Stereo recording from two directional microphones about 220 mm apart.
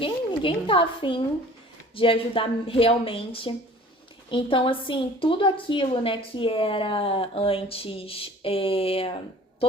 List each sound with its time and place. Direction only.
0.0 s a woman's voice: 25° left (ahead or behind)